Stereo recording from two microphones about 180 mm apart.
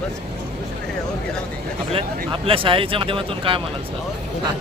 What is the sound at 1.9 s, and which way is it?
Speech, 30° right (ahead or behind).